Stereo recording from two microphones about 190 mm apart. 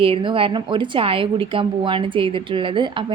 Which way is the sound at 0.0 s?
25° right (ahead or behind).